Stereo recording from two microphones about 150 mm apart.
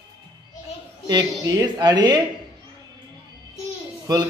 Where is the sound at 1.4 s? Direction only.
25° right (ahead or behind).